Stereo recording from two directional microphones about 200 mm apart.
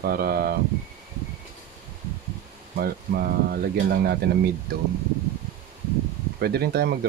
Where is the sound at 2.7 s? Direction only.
50° right (ahead or behind).